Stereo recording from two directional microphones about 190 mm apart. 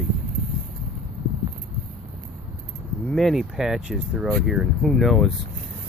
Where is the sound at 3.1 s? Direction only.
Centre (ahead or behind).